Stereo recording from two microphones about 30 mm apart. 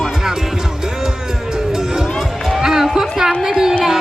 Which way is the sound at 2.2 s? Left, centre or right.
Centre.